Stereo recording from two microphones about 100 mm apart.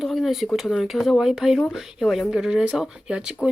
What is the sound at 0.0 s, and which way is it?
Speech, centre (ahead or behind).